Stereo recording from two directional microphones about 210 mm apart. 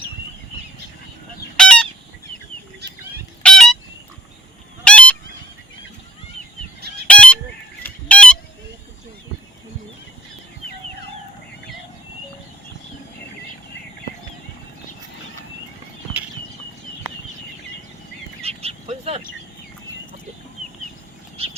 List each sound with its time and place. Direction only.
1.5 s fowl: 5° left (ahead or behind)
2.8 s fowl: 50° right (ahead or behind)
3.4 s a sound: centre (ahead or behind)
4.9 s honk: 5° left (ahead or behind)
7.1 s fowl: 5° left (ahead or behind)
7.9 s honk: 5° left (ahead or behind)
18.4 s bird: 30° right (ahead or behind)
21.4 s bird: 30° right (ahead or behind)